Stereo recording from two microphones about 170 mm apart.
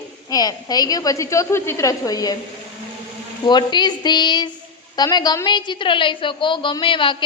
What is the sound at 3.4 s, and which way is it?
A woman's voice, 25° left (ahead or behind).